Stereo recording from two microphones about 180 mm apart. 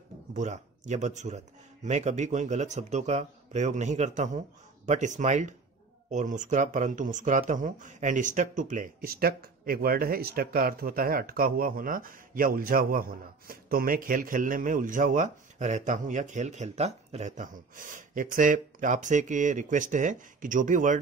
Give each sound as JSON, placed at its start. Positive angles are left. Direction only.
{"t": 0.3, "sound": "a man's voice", "side_deg": -40}